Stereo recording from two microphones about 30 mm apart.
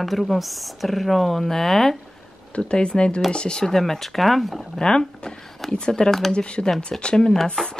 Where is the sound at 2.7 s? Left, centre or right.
Left.